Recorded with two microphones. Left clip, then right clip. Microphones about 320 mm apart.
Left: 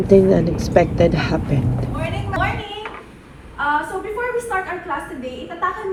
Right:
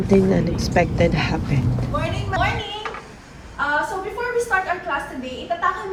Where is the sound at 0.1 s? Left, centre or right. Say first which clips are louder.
Left 5 dB; centre.